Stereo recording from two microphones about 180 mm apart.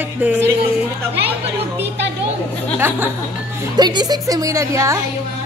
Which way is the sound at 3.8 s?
25° right (ahead or behind).